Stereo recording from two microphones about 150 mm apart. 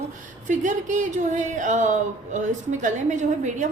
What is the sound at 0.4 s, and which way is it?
Speech, 55° right (ahead or behind).